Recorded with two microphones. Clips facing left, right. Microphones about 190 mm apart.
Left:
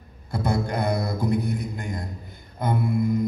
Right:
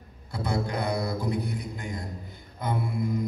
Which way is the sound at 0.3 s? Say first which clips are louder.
Left 4 dB; 50° left (ahead or behind).